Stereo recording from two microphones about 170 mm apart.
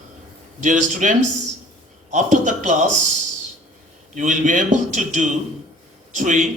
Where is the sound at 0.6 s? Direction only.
50° right (ahead or behind).